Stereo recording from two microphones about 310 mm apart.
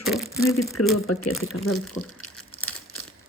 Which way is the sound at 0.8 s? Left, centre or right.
Left.